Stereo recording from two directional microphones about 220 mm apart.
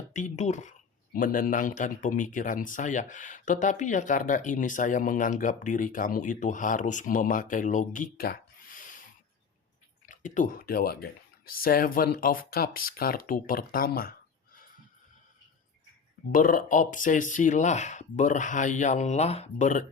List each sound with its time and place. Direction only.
0.1 s speech: 35° left (ahead or behind)
10.1 s speech: 35° left (ahead or behind)
16.3 s speech: 40° left (ahead or behind)